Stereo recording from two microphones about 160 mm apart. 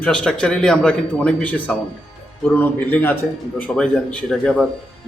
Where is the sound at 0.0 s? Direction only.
5° left (ahead or behind).